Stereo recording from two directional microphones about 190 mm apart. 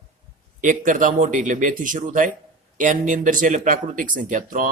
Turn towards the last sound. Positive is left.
turn(degrees=-45)  # may be behind; listen again after turning